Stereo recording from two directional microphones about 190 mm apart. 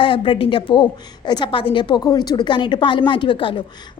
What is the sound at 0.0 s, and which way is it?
A woman's voice, 25° left (ahead or behind).